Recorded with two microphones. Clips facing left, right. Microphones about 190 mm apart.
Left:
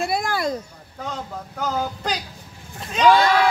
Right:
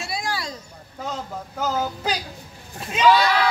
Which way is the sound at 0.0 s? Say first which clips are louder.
Left 6 dB; 55° left (ahead or behind).